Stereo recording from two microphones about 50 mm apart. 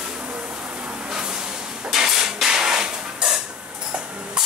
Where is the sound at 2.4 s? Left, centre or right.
Centre.